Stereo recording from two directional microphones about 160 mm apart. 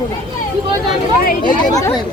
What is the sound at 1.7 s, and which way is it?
Speech, 20° left (ahead or behind).